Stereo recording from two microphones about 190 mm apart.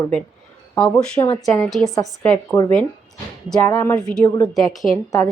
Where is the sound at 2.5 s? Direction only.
15° left (ahead or behind); by 5.0 s centre (ahead or behind).